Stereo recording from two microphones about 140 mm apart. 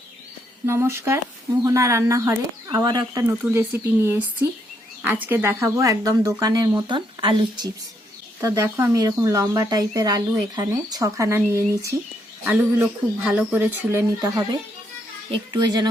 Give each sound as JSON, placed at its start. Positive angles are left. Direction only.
{"t": 0.6, "sound": "speech", "side_deg": -15}
{"t": 8.4, "sound": "speech", "side_deg": -20}
{"t": 12.5, "sound": "speech", "side_deg": -10}
{"t": 14.2, "sound": "speech", "side_deg": -25}